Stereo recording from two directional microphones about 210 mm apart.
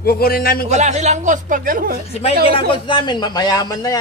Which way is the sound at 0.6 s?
35° right (ahead or behind).